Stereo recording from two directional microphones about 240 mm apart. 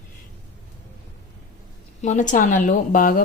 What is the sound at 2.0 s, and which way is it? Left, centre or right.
Speech, left.